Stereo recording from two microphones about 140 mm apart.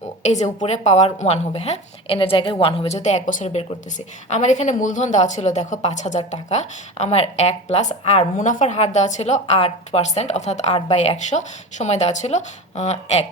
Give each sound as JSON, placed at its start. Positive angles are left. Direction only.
{"t": 0.3, "sound": "speech", "side_deg": 55}
{"t": 2.1, "sound": "a woman's voice", "side_deg": 40}